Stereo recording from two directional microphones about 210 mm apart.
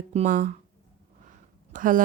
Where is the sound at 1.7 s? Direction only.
40° right (ahead or behind).